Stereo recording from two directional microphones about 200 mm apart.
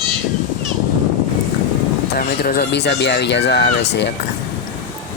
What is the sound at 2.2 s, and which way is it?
Speech, 50° left (ahead or behind).